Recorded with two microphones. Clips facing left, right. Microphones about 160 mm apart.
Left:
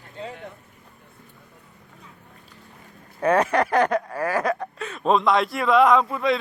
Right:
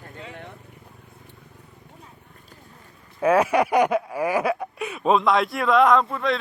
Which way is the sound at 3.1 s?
5° right (ahead or behind).